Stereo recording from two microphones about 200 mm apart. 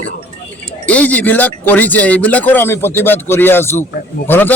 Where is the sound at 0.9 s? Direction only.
5° left (ahead or behind).